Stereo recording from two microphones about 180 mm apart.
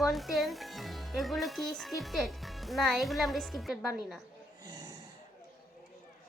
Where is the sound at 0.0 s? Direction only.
Centre (ahead or behind).